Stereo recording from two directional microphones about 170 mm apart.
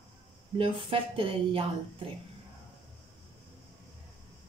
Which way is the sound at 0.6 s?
30° right (ahead or behind).